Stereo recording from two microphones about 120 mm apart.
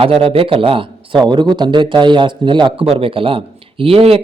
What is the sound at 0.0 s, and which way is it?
Speech, 55° right (ahead or behind).